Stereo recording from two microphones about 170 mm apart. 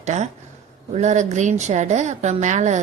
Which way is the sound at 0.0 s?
45° right (ahead or behind).